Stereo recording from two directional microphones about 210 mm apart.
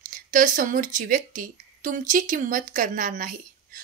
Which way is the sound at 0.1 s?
40° right (ahead or behind).